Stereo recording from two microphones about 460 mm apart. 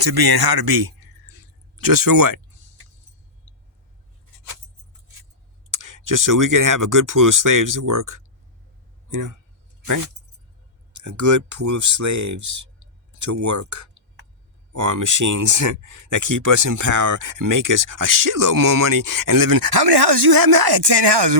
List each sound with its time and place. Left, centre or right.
0.0 s speech: right
5.7 s speech: right
10.9 s speech: right